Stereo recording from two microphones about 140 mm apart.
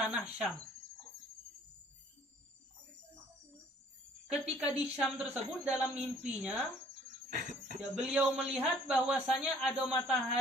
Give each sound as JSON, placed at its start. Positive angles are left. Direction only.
{"t": 0.0, "sound": "speech", "side_deg": -5}
{"t": 4.3, "sound": "a man's voice", "side_deg": -10}
{"t": 7.3, "sound": "speech", "side_deg": -70}
{"t": 7.8, "sound": "a man's voice", "side_deg": -5}